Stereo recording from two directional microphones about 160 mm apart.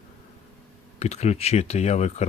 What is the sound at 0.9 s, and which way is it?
Speech, 45° left (ahead or behind).